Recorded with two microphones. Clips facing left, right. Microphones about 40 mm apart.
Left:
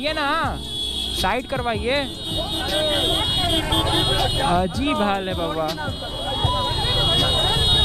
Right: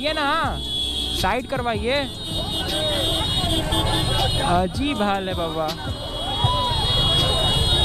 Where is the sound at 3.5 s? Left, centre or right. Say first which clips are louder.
Left 2 dB; left.